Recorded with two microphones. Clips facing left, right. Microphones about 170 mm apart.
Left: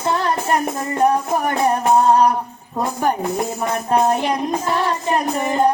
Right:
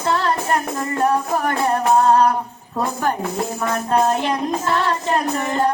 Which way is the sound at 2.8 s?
15° left (ahead or behind).